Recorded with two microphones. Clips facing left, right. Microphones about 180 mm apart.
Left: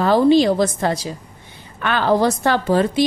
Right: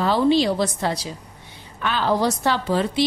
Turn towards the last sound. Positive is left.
turn(degrees=50)  # may be behind; listen again after turning